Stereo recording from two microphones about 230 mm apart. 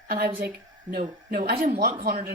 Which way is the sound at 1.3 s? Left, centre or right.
Right.